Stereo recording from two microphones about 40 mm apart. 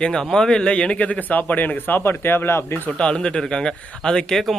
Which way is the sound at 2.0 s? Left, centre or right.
Left.